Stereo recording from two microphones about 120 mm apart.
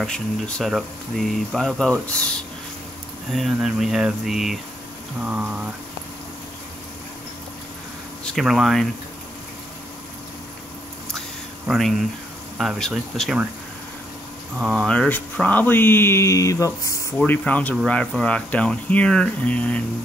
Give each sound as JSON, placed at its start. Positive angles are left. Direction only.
{"t": 0.0, "sound": "speech", "side_deg": 5}
{"t": 3.3, "sound": "speech", "side_deg": 0}
{"t": 5.2, "sound": "a sound", "side_deg": -10}
{"t": 8.3, "sound": "speech", "side_deg": 0}
{"t": 11.7, "sound": "speech", "side_deg": 0}
{"t": 14.6, "sound": "speech", "side_deg": 0}
{"t": 17.3, "sound": "speech", "side_deg": 15}